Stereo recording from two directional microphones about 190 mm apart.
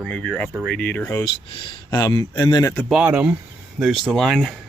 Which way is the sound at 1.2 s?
25° left (ahead or behind).